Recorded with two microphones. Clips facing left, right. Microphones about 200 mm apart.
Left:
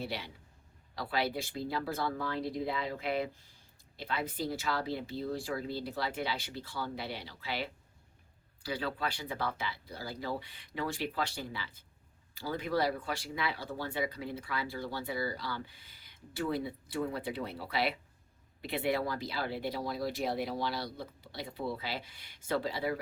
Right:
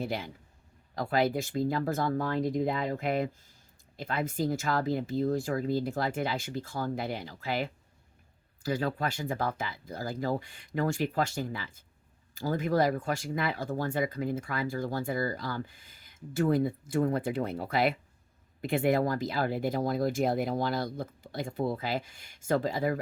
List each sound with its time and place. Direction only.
0.0 s speech: 45° right (ahead or behind)